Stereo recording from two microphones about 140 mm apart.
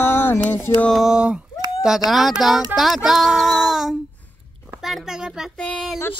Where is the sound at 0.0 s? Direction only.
15° left (ahead or behind).